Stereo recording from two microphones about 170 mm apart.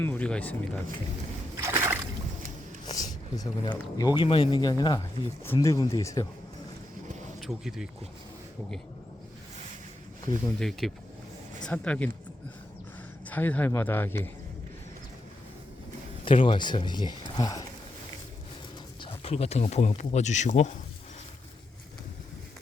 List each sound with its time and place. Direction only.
0.0 s a man's voice: 10° left (ahead or behind)
1.5 s a sound: 15° right (ahead or behind)
2.8 s speech: 20° left (ahead or behind)
7.3 s speech: centre (ahead or behind)
10.6 s a man's voice: centre (ahead or behind)
13.2 s a man's voice: 10° left (ahead or behind)
16.2 s speech: 30° left (ahead or behind)
19.0 s speech: 35° left (ahead or behind)